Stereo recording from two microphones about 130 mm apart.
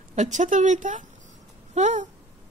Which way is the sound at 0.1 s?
65° right (ahead or behind).